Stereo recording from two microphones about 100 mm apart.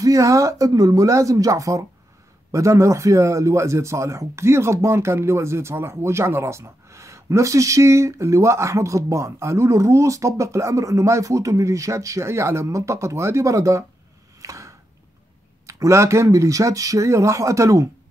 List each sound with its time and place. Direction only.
0.0 s speech: 35° right (ahead or behind)
14.4 s a sound: 30° right (ahead or behind)
15.6 s speech: 30° right (ahead or behind)